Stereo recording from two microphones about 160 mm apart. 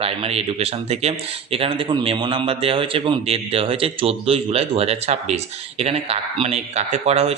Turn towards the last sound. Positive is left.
turn(degrees=-40)  # may be behind; listen again after turning